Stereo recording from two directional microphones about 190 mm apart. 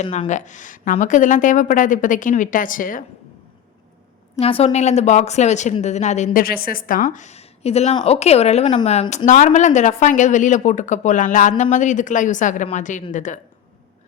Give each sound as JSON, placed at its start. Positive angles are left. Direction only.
{"t": 0.0, "sound": "a woman's voice", "side_deg": 40}
{"t": 4.4, "sound": "speech", "side_deg": 30}